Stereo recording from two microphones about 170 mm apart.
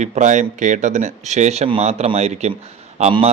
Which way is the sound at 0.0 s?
45° right (ahead or behind).